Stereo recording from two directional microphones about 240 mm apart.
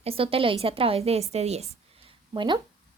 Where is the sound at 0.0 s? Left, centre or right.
Right.